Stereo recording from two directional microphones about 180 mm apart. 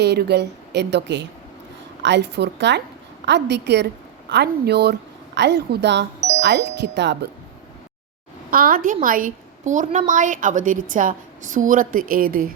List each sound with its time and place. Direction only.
0.0 s a woman's voice: 65° right (ahead or behind)
8.4 s a woman's voice: 55° right (ahead or behind)